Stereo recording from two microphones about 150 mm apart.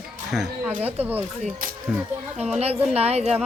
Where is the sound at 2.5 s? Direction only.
45° right (ahead or behind).